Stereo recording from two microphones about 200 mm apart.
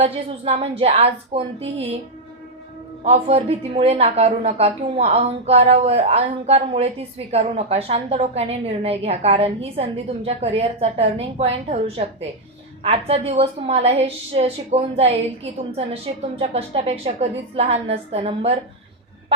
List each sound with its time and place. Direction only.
0.0 s a woman's voice: 30° right (ahead or behind)
3.0 s a woman's voice: 30° right (ahead or behind)